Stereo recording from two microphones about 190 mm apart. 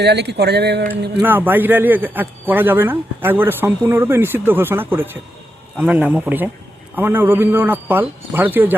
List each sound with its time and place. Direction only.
0.0 s speech: 60° right (ahead or behind)
1.2 s a man's voice: 10° right (ahead or behind)